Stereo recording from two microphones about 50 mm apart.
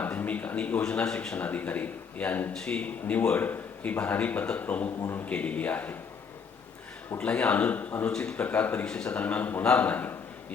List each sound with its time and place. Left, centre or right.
0.0 s speech: left; by 1.4 s centre
1.4 s speech: left
2.5 s a man's voice: centre
2.8 s a man's voice: left
7.2 s a man's voice: left